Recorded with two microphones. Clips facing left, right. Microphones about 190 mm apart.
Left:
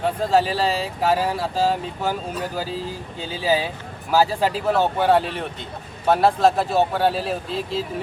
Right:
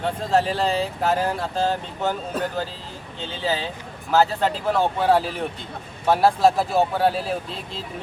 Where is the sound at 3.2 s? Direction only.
10° left (ahead or behind).